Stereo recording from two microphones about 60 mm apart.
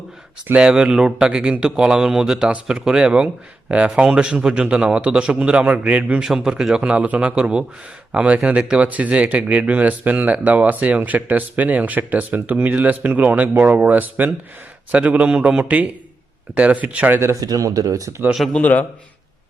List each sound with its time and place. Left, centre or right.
0.6 s speech: centre
6.2 s speech: centre
17.4 s speech: right
18.5 s a man's voice: left